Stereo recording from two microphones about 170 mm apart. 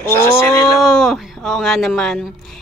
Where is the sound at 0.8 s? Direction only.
Centre (ahead or behind).